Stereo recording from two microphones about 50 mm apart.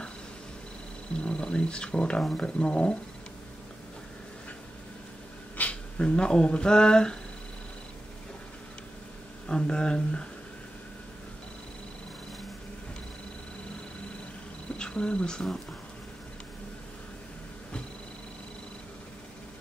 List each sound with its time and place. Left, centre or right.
1.1 s speech: centre
5.6 s speech: left
9.5 s speech: centre
14.8 s speech: centre